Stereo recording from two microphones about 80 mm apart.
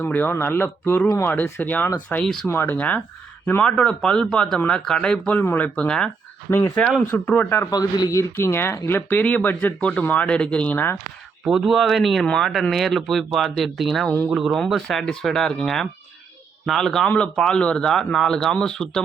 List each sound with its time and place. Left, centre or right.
0.0 s speech: left
2.2 s speech: centre
2.5 s speech: left
7.0 s speech: left
7.7 s a man's voice: left
8.1 s speech: left
11.4 s speech: centre
14.5 s speech: centre